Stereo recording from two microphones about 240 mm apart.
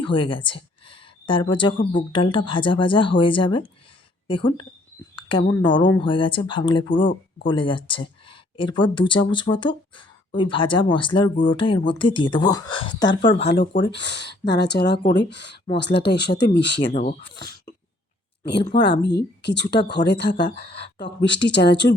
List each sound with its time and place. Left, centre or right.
0.0 s speech: left
13.2 s speech: left
16.8 s speech: left
18.4 s speech: left